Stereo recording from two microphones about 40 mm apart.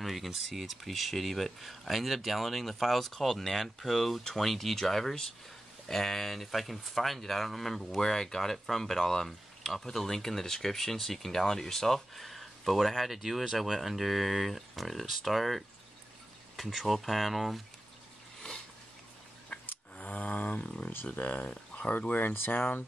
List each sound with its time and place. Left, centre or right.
0.0 s speech: centre
19.5 s a sound: left
21.1 s speech: left
22.0 s speech: left